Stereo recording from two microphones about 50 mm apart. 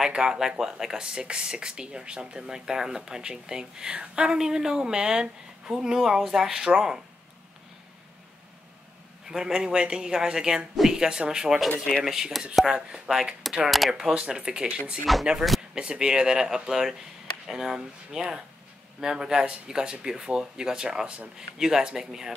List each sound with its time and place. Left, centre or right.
0.0 s speech: centre
9.3 s speech: centre
13.7 s speech: centre
13.9 s speech: centre
15.1 s speech: centre
15.7 s speech: centre